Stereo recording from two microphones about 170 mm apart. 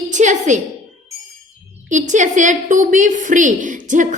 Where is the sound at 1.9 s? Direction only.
45° right (ahead or behind).